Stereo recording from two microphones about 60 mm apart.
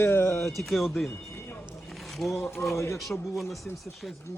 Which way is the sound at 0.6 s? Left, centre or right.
Centre.